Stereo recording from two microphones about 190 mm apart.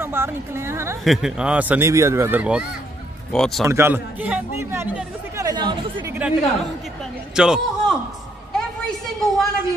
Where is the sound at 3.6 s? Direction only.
15° right (ahead or behind).